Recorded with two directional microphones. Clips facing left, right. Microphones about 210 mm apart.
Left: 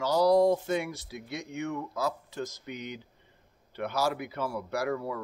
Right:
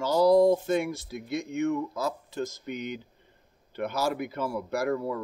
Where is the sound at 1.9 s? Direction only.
25° right (ahead or behind).